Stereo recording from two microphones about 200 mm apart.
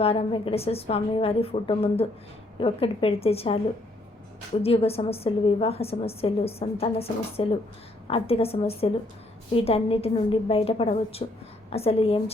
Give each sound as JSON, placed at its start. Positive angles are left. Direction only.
{"t": 0.0, "sound": "a woman's voice", "side_deg": 30}
{"t": 4.6, "sound": "a woman's voice", "side_deg": 30}